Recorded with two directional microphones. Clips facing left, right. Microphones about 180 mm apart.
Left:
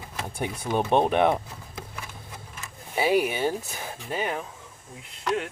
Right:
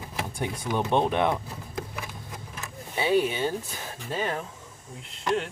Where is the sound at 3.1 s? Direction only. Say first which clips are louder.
Right 2 dB; 15° left (ahead or behind).